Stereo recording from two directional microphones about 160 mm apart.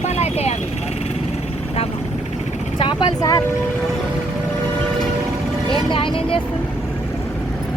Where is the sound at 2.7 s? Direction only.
30° left (ahead or behind).